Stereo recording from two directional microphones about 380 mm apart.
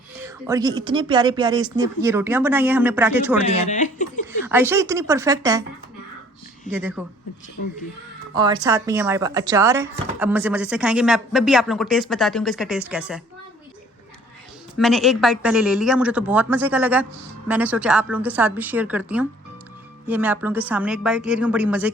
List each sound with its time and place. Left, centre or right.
0.2 s speech: centre
3.7 s speech: centre
4.3 s speech: centre
6.7 s speech: centre
8.4 s speech: centre
14.8 s speech: centre